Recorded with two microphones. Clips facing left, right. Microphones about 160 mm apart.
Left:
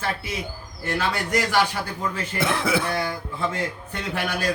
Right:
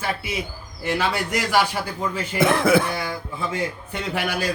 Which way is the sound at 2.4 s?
50° right (ahead or behind).